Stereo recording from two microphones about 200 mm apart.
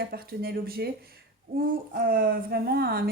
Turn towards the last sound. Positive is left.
turn(degrees=-50)  # may be behind; listen again after turning